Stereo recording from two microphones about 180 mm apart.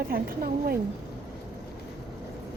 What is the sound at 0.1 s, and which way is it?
Speech, 55° right (ahead or behind).